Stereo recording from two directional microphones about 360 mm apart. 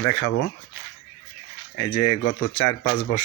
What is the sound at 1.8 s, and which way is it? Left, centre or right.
A man's voice, left.